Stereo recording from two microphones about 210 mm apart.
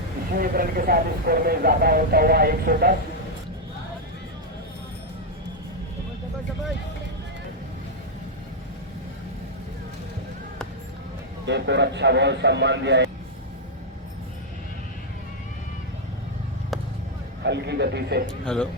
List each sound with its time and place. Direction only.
0.3 s speech: 45° right (ahead or behind)
11.4 s a man's voice: 55° right (ahead or behind)
17.4 s speech: 55° right (ahead or behind)
18.4 s speech: 5° left (ahead or behind)